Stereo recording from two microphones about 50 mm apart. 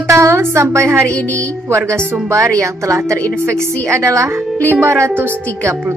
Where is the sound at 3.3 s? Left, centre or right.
Right.